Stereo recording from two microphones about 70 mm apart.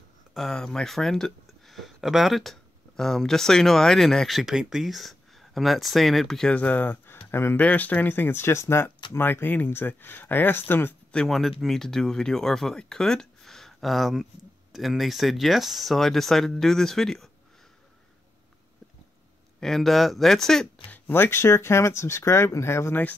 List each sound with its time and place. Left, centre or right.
0.3 s speech: centre
6.5 s speech: left
7.6 s speech: left
11.1 s speech: centre
19.6 s speech: centre
20.9 s speech: left